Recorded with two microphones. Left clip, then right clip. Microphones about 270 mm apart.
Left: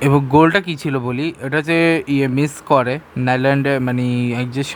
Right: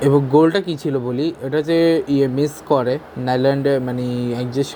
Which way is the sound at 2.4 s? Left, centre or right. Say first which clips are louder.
Even; left.